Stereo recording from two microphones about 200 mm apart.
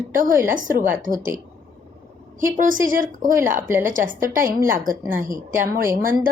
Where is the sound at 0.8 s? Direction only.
10° right (ahead or behind).